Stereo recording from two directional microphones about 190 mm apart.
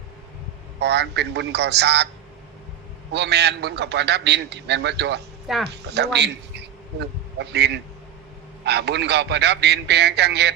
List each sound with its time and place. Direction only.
0.8 s a man's voice: 65° right (ahead or behind)
3.1 s a man's voice: 60° right (ahead or behind)
5.5 s speech: centre (ahead or behind)
5.9 s a man's voice: 65° right (ahead or behind)